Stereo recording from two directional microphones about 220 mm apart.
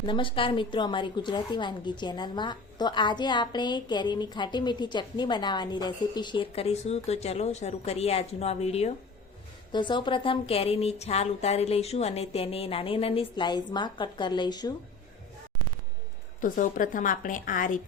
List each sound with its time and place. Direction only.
0.0 s a woman's voice: 20° left (ahead or behind)
16.4 s a woman's voice: 35° left (ahead or behind)